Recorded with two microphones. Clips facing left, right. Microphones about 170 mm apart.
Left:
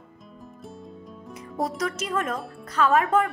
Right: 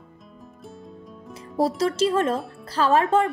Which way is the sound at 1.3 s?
30° right (ahead or behind).